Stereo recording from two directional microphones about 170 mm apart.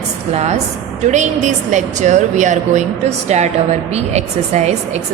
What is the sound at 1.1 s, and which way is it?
A woman's voice, 45° right (ahead or behind).